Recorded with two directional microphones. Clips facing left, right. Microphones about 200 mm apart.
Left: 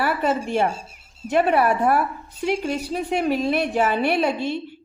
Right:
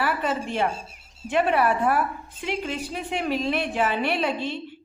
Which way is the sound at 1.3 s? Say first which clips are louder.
Left 3 dB; 40° left (ahead or behind).